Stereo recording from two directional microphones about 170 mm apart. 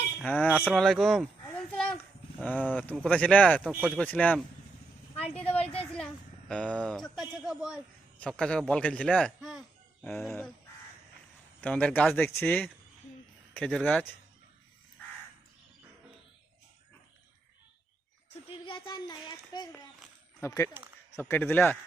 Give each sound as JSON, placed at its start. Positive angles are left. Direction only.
{"t": 0.2, "sound": "speech", "side_deg": 10}
{"t": 1.7, "sound": "a sound", "side_deg": 5}
{"t": 2.4, "sound": "speech", "side_deg": 10}
{"t": 3.6, "sound": "speech", "side_deg": -5}
{"t": 3.9, "sound": "speech", "side_deg": 10}
{"t": 6.5, "sound": "speech", "side_deg": 5}
{"t": 11.6, "sound": "speech", "side_deg": 5}
{"t": 18.4, "sound": "a sound", "side_deg": 30}
{"t": 20.4, "sound": "speech", "side_deg": 15}